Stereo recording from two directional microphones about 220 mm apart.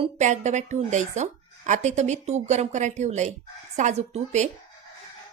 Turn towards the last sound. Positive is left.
turn(degrees=-30)  # may be behind; listen again after turning